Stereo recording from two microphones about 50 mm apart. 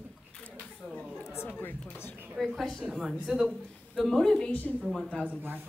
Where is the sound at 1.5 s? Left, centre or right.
Left.